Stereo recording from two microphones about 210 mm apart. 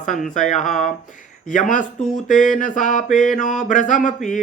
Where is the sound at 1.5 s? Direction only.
40° left (ahead or behind).